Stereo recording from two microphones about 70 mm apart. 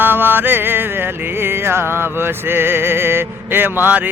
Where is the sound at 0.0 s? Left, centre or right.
Right.